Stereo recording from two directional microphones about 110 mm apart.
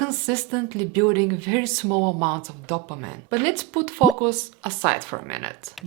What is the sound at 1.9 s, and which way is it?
Speech, 30° right (ahead or behind).